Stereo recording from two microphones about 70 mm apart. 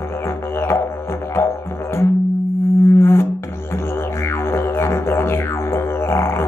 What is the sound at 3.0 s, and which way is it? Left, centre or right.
Music, left.